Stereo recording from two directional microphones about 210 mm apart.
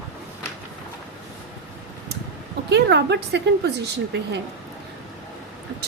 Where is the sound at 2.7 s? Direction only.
55° right (ahead or behind).